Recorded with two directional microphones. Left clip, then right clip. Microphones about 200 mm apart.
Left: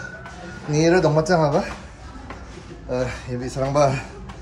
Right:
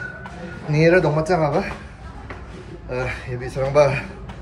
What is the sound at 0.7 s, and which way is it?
Speech, 20° left (ahead or behind).